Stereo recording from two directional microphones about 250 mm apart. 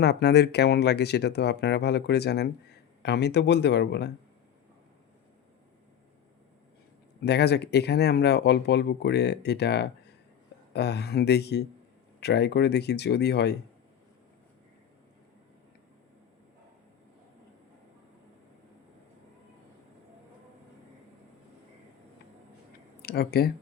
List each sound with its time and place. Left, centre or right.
0.0 s speech: left
7.3 s speech: left
23.0 s speech: left